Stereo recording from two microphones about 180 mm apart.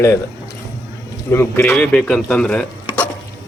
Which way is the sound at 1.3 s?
10° left (ahead or behind).